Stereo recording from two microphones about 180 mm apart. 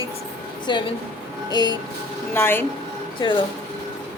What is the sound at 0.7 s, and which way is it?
Speech, 25° left (ahead or behind).